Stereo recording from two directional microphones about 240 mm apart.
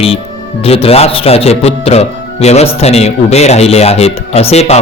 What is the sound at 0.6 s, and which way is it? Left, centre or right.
A man's voice, left.